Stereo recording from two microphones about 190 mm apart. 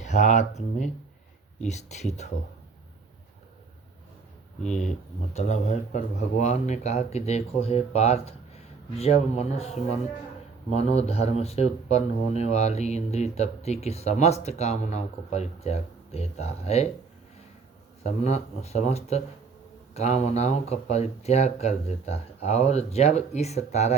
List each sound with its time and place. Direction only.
0.0 s speech: 40° left (ahead or behind)
4.6 s speech: 40° left (ahead or behind)
18.0 s speech: 35° left (ahead or behind)